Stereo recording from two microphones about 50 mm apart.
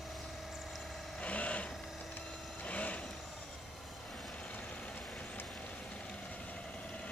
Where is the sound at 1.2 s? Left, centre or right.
Left.